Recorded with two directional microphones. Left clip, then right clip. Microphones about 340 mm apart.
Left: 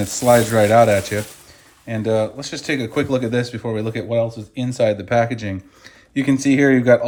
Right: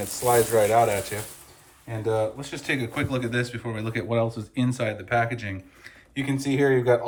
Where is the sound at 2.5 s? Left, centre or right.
Centre.